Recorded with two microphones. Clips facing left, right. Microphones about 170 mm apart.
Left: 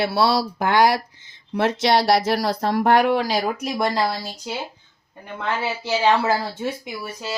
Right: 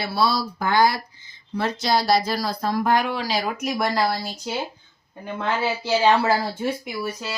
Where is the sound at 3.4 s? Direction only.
30° left (ahead or behind).